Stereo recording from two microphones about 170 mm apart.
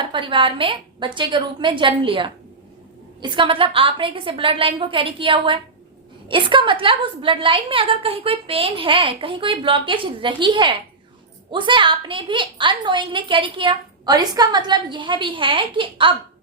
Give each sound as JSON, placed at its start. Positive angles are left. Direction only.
{"t": 0.0, "sound": "a woman's voice", "side_deg": -30}